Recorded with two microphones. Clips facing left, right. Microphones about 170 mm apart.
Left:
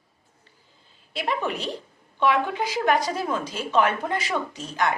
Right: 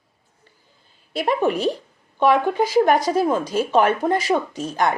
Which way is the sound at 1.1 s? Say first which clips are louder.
Right 7 dB; 45° right (ahead or behind).